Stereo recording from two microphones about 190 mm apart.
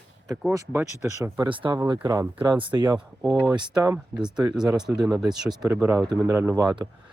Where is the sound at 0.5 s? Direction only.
15° right (ahead or behind).